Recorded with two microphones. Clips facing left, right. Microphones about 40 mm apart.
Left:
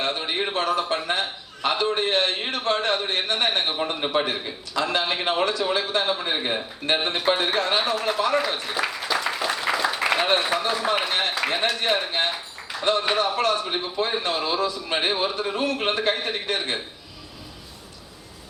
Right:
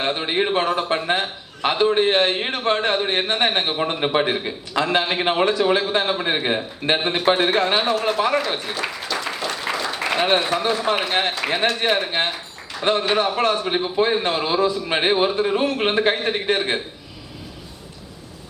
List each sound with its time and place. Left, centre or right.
0.0 s a man's voice: right
7.9 s a man's voice: centre
9.0 s applause: centre
10.2 s a man's voice: centre
12.2 s a man's voice: right
12.7 s a sound: centre
13.1 s a man's voice: right